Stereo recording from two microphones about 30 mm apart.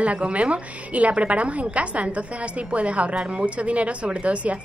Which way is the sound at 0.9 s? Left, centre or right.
Right.